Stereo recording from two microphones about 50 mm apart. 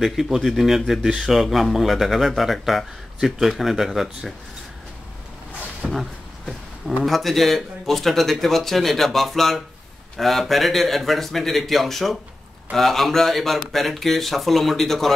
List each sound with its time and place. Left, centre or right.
0.0 s speech: centre
1.0 s speech: centre
1.3 s speech: centre
5.9 s a sound: centre
7.1 s speech: centre